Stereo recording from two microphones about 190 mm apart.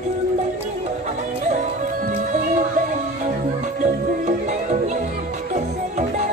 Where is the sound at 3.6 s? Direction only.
40° right (ahead or behind).